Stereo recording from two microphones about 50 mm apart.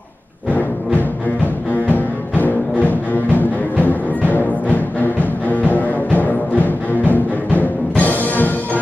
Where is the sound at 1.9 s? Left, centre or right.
Left.